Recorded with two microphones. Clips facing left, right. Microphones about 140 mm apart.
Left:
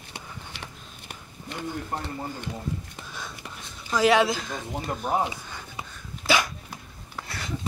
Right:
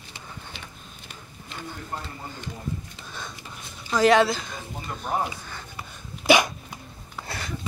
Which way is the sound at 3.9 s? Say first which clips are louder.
Right 2 dB; 10° left (ahead or behind).